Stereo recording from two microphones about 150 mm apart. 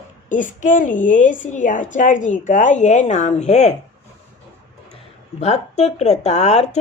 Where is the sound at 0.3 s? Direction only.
60° left (ahead or behind).